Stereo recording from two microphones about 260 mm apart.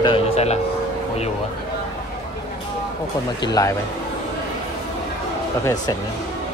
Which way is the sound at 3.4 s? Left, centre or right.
Centre.